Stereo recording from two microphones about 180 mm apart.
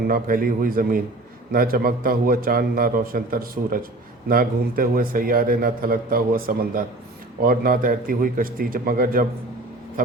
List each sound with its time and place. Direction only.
0.1 s a man's voice: 50° right (ahead or behind)